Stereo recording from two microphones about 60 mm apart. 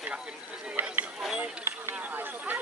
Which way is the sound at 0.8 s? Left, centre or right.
Right.